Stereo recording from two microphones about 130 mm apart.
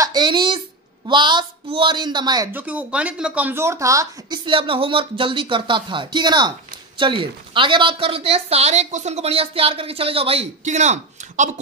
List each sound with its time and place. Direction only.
0.0 s a sound: 35° right (ahead or behind)
1.0 s speech: 35° right (ahead or behind)
2.5 s speech: 10° right (ahead or behind)
4.5 s a woman's voice: 40° right (ahead or behind); by 11.5 s 65° right (ahead or behind)